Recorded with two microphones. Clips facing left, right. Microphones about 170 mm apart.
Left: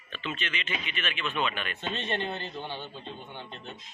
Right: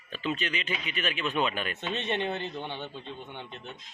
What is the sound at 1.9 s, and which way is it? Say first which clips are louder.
Speech: right 3 dB; 20° right (ahead or behind).